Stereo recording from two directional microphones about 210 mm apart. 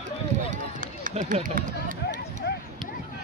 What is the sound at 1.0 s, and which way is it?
Speech, 35° right (ahead or behind).